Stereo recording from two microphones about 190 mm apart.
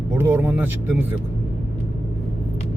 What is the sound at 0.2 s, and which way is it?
Speech, 10° right (ahead or behind).